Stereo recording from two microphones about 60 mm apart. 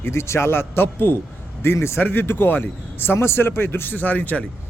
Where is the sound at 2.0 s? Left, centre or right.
Left.